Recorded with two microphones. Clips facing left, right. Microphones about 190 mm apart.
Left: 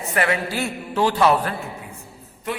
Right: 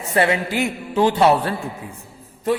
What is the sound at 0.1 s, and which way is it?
A man's voice, 25° right (ahead or behind).